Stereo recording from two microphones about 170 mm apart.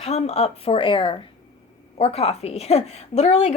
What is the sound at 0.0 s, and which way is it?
A woman's voice, 40° left (ahead or behind).